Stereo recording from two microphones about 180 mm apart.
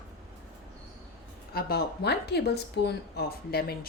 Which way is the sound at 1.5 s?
60° left (ahead or behind).